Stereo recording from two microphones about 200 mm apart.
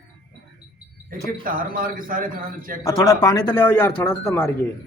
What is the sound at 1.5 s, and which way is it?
A man's voice, 45° right (ahead or behind).